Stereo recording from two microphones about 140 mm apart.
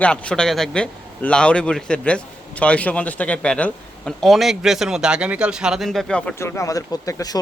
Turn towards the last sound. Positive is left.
turn(degrees=25)  # may be behind; listen again after turning